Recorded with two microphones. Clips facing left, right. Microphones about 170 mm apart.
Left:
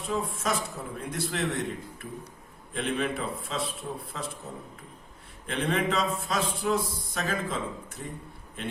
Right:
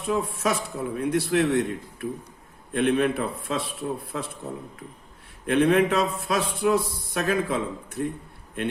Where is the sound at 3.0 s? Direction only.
60° right (ahead or behind).